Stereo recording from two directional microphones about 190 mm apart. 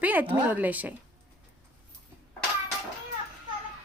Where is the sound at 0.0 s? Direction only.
10° right (ahead or behind).